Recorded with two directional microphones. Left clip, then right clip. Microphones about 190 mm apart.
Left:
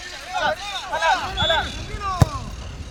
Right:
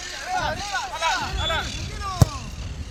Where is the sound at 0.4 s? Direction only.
60° left (ahead or behind).